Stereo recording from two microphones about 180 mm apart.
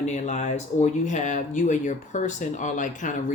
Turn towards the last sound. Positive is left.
turn(degrees=45)  # may be behind; listen again after turning